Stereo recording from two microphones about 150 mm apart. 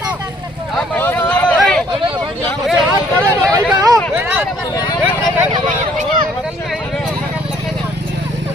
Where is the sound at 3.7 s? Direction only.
25° right (ahead or behind).